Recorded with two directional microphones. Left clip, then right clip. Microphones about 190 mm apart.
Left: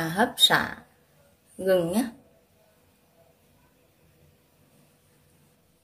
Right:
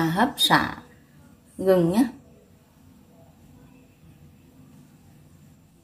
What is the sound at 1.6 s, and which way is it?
Speech, 55° left (ahead or behind).